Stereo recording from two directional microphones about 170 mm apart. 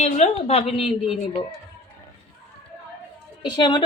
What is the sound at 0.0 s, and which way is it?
A woman's voice, 40° left (ahead or behind).